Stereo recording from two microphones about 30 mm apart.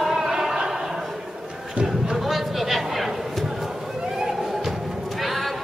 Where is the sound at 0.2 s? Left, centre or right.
Right.